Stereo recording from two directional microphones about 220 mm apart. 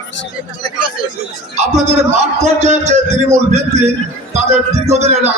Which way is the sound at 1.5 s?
30° right (ahead or behind).